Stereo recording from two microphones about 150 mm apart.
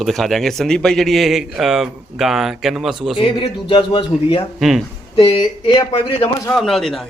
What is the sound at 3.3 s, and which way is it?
Speech, 35° left (ahead or behind).